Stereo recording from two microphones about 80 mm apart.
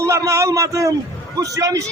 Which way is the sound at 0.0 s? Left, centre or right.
Right.